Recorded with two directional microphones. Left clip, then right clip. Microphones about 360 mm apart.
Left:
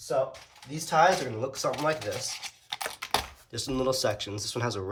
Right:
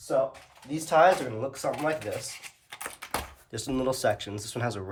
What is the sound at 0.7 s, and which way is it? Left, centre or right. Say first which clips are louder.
Speech: right 2 dB; centre.